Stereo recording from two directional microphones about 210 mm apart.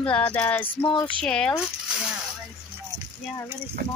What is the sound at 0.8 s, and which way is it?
Speech, 25° left (ahead or behind).